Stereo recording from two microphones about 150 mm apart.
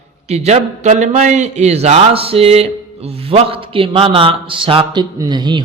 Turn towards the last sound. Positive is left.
turn(degrees=-30)  # may be behind; listen again after turning